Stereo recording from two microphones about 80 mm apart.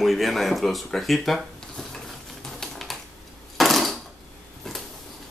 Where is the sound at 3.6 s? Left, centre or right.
Centre.